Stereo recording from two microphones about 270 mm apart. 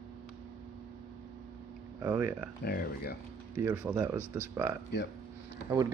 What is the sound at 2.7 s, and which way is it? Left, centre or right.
Speech, left.